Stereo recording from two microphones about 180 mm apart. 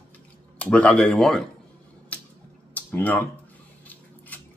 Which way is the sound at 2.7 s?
10° left (ahead or behind).